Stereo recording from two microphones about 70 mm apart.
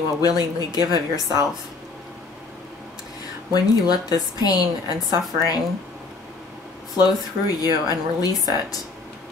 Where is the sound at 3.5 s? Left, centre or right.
Left.